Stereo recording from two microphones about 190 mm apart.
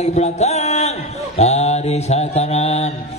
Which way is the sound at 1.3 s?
35° left (ahead or behind).